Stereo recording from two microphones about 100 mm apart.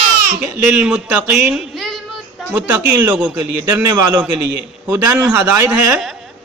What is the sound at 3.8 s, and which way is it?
A man's voice, 30° right (ahead or behind).